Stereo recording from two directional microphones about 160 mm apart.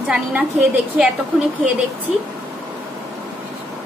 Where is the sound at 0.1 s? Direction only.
10° right (ahead or behind).